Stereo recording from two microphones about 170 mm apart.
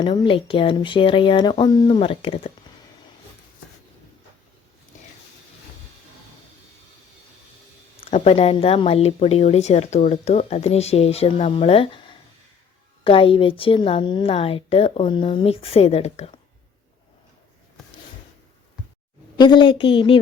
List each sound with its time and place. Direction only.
0.0 s speech: 25° left (ahead or behind)
8.0 s speech: 35° left (ahead or behind)
19.4 s speech: 30° left (ahead or behind)